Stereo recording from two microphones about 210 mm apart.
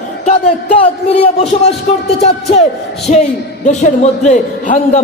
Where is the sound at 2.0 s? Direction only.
30° left (ahead or behind).